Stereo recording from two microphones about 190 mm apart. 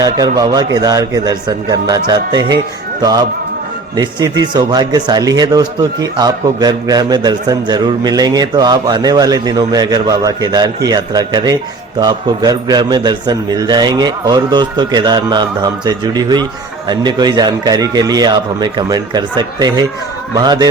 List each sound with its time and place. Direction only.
0.0 s speech: 20° right (ahead or behind)